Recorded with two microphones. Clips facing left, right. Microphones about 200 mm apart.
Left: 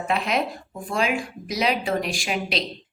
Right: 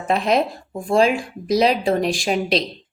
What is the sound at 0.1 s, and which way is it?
A woman's voice, 35° right (ahead or behind).